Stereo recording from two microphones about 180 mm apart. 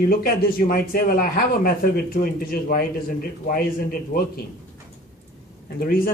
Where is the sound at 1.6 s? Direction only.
55° left (ahead or behind).